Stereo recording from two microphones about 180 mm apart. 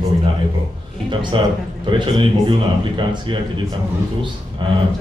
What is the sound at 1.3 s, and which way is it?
A man's voice, 30° right (ahead or behind).